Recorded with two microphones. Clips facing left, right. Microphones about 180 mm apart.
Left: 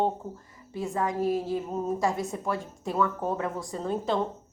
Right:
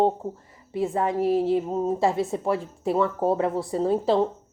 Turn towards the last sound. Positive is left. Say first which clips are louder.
# right 7 dB
turn(degrees=-30)  # may be behind; listen again after turning